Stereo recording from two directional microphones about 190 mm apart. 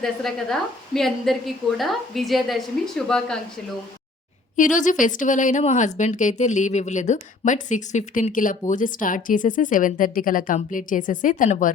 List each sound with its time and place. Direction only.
0.0 s a woman's voice: centre (ahead or behind)
4.5 s speech: 40° left (ahead or behind)